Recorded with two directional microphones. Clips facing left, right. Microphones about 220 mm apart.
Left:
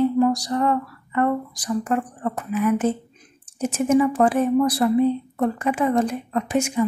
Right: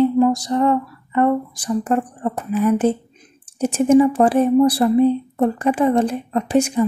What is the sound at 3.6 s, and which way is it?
A woman's voice, 30° right (ahead or behind).